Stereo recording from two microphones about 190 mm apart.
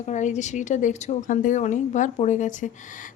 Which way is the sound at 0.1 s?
40° left (ahead or behind).